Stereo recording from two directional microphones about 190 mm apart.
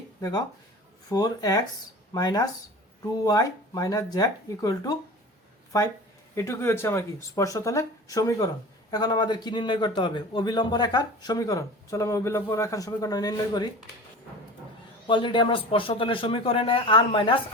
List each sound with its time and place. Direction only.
0.2 s speech: 20° left (ahead or behind)
15.0 s speech: 25° left (ahead or behind)